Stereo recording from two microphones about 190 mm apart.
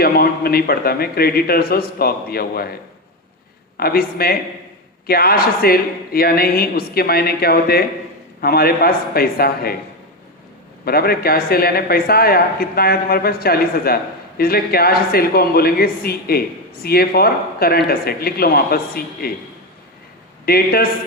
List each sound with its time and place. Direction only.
0.0 s speech: 50° left (ahead or behind)
3.8 s speech: 55° left (ahead or behind)
10.8 s speech: 55° left (ahead or behind)
20.4 s a man's voice: 55° left (ahead or behind)